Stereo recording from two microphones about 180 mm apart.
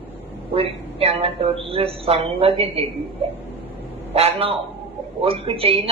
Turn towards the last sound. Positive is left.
turn(degrees=-30)  # may be behind; listen again after turning